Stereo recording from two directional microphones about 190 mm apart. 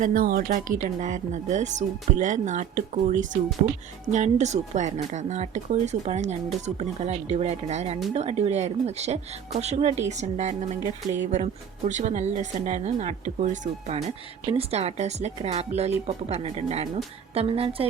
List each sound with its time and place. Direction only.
0.0 s speech: 45° right (ahead or behind); by 17.8 s 30° right (ahead or behind)